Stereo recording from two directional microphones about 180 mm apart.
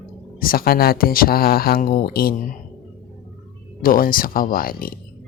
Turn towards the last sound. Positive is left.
turn(degrees=55)  # may be behind; listen again after turning